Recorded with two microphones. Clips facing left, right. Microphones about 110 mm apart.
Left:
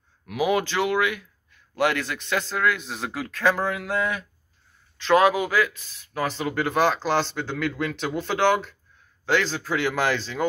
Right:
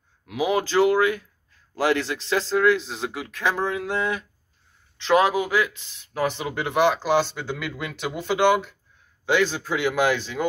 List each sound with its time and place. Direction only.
0.3 s a man's voice: 30° right (ahead or behind)